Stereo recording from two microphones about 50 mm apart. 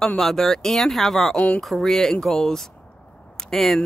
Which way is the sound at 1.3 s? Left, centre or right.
Left.